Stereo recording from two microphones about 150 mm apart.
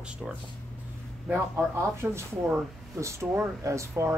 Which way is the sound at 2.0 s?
15° right (ahead or behind).